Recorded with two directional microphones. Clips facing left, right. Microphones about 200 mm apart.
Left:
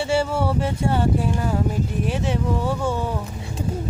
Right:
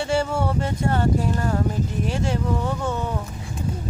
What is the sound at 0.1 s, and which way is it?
Speech, 5° left (ahead or behind).